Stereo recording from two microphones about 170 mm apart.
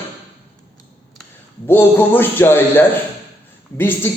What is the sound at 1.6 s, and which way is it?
A man's voice, 15° left (ahead or behind).